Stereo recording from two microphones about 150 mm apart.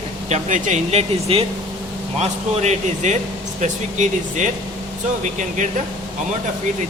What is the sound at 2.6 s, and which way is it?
Speech, 50° right (ahead or behind).